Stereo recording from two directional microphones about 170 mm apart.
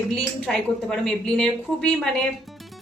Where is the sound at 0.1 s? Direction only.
5° left (ahead or behind).